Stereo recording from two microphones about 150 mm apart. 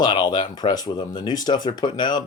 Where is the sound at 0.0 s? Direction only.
30° left (ahead or behind).